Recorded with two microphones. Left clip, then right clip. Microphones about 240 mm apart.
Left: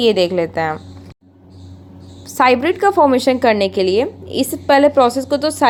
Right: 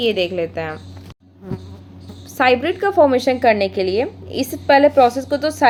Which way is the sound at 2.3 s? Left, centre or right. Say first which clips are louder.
Left 3 dB; centre.